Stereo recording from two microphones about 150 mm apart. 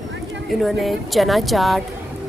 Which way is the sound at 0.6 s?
Centre (ahead or behind).